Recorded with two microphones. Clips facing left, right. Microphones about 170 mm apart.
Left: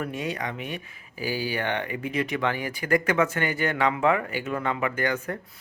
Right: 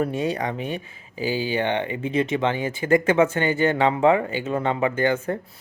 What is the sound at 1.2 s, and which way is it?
Speech, 20° right (ahead or behind).